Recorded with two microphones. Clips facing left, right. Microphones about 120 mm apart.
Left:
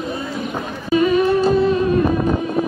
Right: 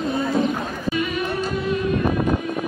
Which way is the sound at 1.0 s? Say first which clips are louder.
Left 11 dB; 35° left (ahead or behind).